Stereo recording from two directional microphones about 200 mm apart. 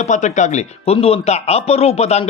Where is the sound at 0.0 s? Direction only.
35° left (ahead or behind).